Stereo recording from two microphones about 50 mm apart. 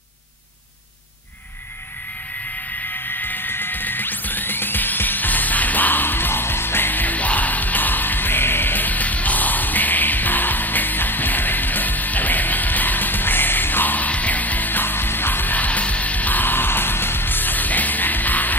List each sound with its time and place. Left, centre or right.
2.9 s music: left